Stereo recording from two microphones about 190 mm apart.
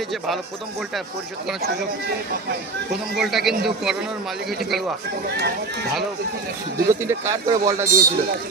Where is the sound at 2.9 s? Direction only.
Centre (ahead or behind).